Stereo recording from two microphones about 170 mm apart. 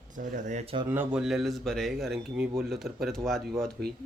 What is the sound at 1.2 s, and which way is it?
Speech, centre (ahead or behind).